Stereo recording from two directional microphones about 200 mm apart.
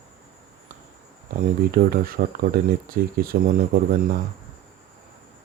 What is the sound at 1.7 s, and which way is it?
Speech, 45° right (ahead or behind).